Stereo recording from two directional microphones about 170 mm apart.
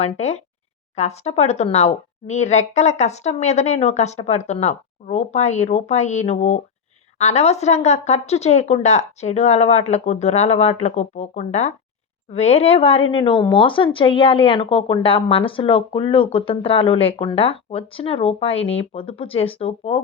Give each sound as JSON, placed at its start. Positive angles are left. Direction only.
{"t": 0.0, "sound": "speech", "side_deg": 40}